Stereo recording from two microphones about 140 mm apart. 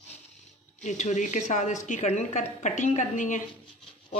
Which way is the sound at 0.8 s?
60° left (ahead or behind).